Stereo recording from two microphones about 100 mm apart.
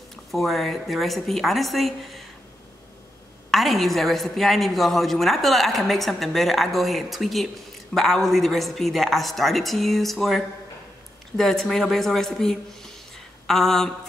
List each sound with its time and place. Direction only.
0.1 s a woman's voice: centre (ahead or behind)
3.4 s a woman's voice: centre (ahead or behind)